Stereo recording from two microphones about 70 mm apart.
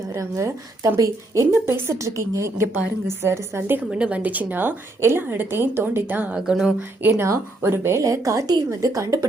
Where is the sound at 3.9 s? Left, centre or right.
Centre.